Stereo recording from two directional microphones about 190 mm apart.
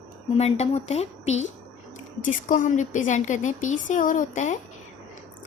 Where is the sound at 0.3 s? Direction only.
35° left (ahead or behind).